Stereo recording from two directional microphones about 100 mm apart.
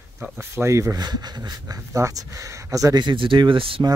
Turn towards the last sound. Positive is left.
turn(degrees=-65)  # may be behind; listen again after turning